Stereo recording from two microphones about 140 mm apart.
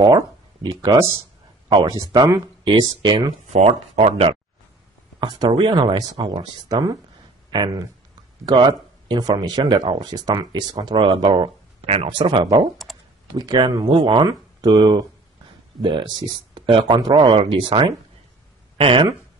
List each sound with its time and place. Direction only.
0.0 s speech: 30° right (ahead or behind)
3.4 s speech: 50° right (ahead or behind)
5.2 s speech: 30° right (ahead or behind)
12.9 s computer keyboard: centre (ahead or behind)
13.4 s speech: 30° right (ahead or behind)